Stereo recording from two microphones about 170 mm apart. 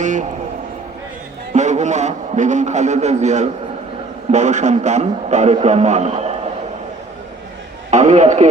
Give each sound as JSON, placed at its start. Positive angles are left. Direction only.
{"t": 0.0, "sound": "a sound", "side_deg": -45}
{"t": 1.5, "sound": "a man's voice", "side_deg": -45}
{"t": 7.9, "sound": "a man's voice", "side_deg": -45}